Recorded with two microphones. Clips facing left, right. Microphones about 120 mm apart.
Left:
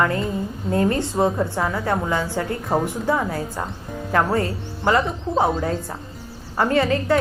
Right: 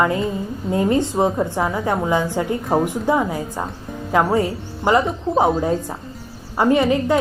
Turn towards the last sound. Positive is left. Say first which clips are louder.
# right 3 dB
turn(degrees=-15)  # may be behind; listen again after turning